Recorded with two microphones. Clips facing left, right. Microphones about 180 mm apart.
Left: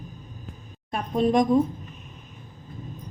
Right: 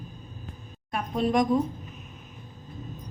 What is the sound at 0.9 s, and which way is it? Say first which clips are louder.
Speech: left 3 dB; 25° left (ahead or behind).